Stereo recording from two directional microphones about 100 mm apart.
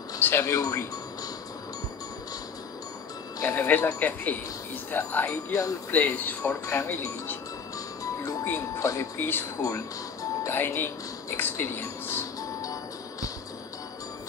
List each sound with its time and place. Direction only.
0.2 s speech: 25° left (ahead or behind)
3.4 s speech: 15° left (ahead or behind)
5.5 s speech: 35° left (ahead or behind)
5.9 s speech: 15° left (ahead or behind)
6.6 s speech: 35° left (ahead or behind)
8.7 s speech: 35° left (ahead or behind)
9.2 s speech: 20° left (ahead or behind)
9.6 s speech: 35° left (ahead or behind)
10.4 s speech: 20° left (ahead or behind)
11.3 s music: 20° left (ahead or behind)